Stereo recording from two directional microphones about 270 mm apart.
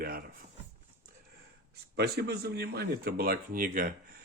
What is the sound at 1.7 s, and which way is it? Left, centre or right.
Speech, right.